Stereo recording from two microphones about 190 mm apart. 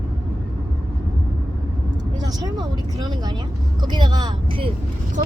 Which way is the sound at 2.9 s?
25° right (ahead or behind).